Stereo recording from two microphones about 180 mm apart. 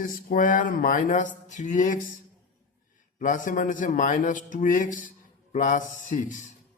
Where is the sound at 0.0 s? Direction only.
50° left (ahead or behind).